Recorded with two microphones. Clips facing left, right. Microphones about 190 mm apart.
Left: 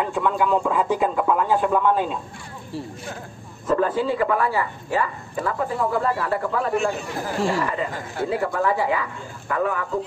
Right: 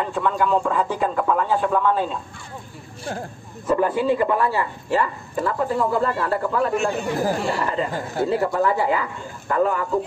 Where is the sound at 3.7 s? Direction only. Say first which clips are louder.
Right 2 dB; 15° right (ahead or behind).